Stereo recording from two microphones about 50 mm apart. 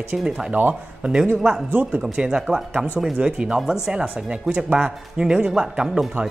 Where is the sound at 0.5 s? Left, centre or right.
Right.